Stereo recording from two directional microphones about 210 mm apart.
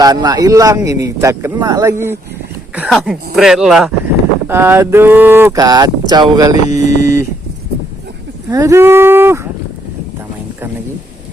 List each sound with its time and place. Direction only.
0.0 s speech: 20° right (ahead or behind)
6.7 s speech: 35° left (ahead or behind)
8.4 s speech: 15° right (ahead or behind)